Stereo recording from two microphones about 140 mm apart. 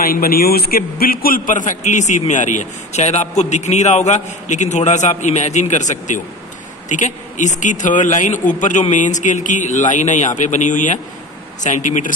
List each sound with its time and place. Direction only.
0.0 s a man's voice: 90° left; by 12.1 s 60° left (ahead or behind)